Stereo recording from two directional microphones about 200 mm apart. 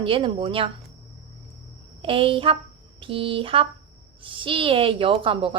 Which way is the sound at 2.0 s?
25° right (ahead or behind).